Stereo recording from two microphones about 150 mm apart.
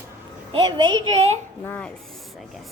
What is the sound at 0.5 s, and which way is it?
Speech, 30° right (ahead or behind).